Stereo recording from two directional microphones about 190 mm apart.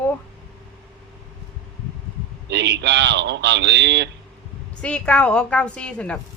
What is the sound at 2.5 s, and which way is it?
A man's voice, 65° right (ahead or behind).